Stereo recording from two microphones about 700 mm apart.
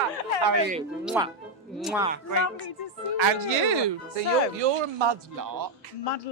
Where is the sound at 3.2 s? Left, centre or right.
Right.